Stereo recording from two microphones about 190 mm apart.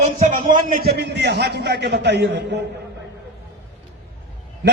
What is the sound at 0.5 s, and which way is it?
A man's voice, 50° right (ahead or behind).